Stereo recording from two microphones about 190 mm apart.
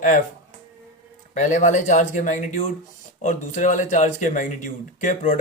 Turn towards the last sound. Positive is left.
turn(degrees=45)  # may be behind; listen again after turning